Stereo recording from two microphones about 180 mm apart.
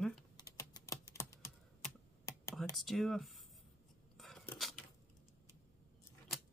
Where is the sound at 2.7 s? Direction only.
Centre (ahead or behind).